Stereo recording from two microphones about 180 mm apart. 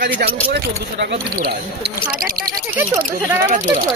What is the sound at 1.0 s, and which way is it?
Speech, 70° right (ahead or behind).